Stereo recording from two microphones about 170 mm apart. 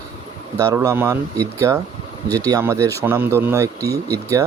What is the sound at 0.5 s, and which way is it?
Speech, 20° right (ahead or behind).